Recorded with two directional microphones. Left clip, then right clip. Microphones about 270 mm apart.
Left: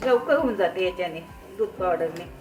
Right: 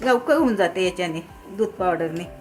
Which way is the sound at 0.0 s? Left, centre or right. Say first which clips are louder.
Right 2 dB; right.